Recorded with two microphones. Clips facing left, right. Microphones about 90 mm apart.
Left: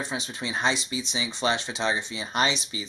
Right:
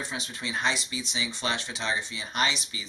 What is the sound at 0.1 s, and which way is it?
Speech, 20° left (ahead or behind).